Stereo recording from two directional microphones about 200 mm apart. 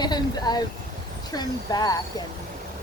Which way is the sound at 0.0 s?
20° left (ahead or behind).